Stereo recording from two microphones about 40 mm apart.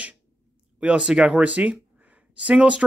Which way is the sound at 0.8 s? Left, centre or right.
Right.